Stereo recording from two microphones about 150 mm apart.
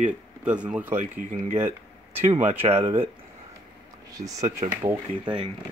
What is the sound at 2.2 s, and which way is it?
Speech, 45° right (ahead or behind).